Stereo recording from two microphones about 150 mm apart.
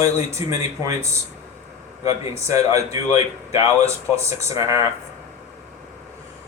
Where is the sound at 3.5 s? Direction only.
45° left (ahead or behind).